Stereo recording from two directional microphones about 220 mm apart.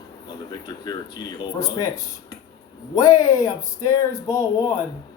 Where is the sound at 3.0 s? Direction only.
15° left (ahead or behind).